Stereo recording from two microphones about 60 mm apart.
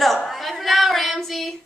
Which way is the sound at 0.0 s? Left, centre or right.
Centre.